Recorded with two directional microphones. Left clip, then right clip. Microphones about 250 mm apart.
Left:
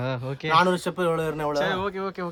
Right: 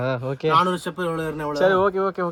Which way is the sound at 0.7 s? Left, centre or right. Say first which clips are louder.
Left 1 dB; left.